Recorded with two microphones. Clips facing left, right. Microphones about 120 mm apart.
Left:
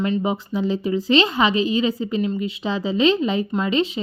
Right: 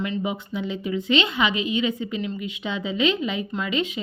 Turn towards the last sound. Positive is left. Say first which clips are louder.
# left 5 dB
turn(degrees=30)  # may be behind; listen again after turning